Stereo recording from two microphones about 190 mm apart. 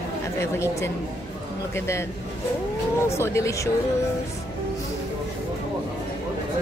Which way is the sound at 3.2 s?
15° left (ahead or behind).